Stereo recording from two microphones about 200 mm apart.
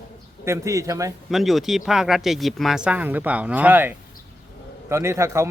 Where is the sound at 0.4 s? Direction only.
15° right (ahead or behind).